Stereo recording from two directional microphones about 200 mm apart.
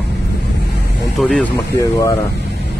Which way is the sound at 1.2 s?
5° left (ahead or behind).